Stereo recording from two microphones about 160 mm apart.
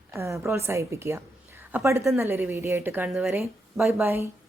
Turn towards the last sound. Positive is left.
turn(degrees=0)  # may be behind; listen again after turning